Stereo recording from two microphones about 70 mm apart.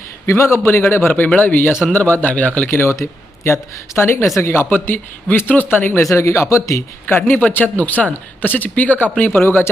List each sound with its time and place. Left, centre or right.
0.3 s a man's voice: left; by 2.6 s centre
2.6 s a man's voice: left
6.0 s speech: left
7.1 s a man's voice: left